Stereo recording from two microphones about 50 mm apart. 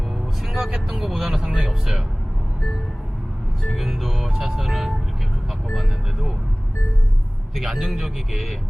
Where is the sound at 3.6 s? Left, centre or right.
Centre.